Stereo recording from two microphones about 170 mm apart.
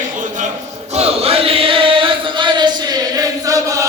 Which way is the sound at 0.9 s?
35° right (ahead or behind).